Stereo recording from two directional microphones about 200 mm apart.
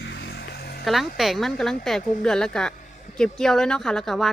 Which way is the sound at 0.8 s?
Centre (ahead or behind).